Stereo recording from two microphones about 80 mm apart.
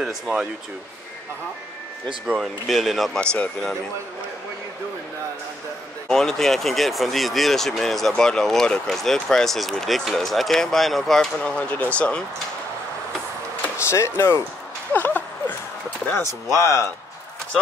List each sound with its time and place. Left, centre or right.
0.0 s speech: centre
2.4 s speech: centre
6.0 s speech: centre
13.7 s speech: left
14.9 s a sound: left
16.2 s speech: left